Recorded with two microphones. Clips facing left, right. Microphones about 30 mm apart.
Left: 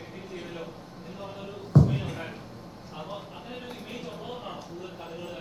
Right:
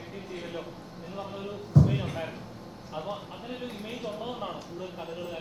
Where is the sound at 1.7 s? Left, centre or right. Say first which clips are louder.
Left 1 dB; left.